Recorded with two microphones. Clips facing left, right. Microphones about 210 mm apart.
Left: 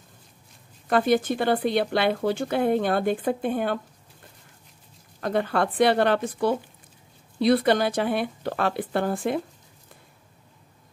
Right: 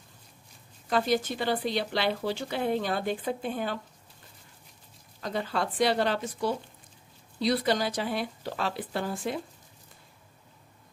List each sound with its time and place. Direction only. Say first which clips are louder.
0.8 s speech: left 5 dB; 55° left (ahead or behind)
5.2 s speech: left 7 dB; 60° left (ahead or behind)